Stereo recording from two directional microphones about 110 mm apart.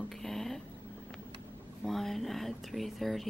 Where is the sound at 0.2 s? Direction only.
Centre (ahead or behind).